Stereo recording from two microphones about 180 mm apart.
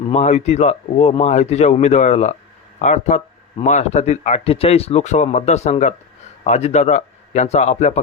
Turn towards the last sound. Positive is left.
turn(degrees=40)  # may be behind; listen again after turning